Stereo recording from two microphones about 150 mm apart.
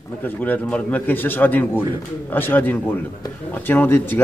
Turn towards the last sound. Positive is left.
turn(degrees=15)  # may be behind; listen again after turning